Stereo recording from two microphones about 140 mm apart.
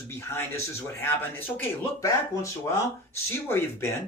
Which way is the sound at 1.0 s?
15° left (ahead or behind).